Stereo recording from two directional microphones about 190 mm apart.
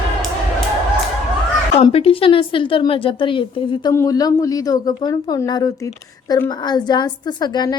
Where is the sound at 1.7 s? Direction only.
35° left (ahead or behind).